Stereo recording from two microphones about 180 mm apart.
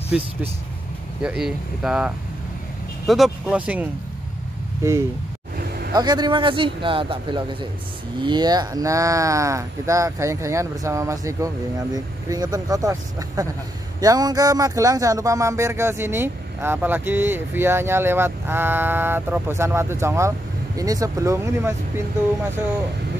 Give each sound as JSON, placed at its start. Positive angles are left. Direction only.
{"t": 0.1, "sound": "speech", "side_deg": -5}
{"t": 5.9, "sound": "speech", "side_deg": -25}